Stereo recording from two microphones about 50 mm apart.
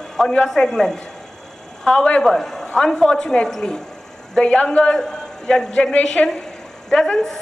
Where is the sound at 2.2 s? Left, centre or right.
Centre.